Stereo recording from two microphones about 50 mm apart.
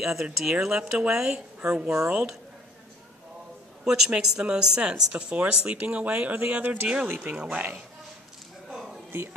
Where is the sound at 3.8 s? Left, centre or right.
Centre.